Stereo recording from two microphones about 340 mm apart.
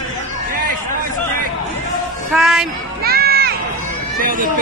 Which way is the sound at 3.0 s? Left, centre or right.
Right.